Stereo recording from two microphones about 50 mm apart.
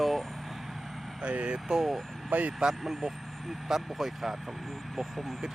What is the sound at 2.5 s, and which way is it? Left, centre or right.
Speech, centre.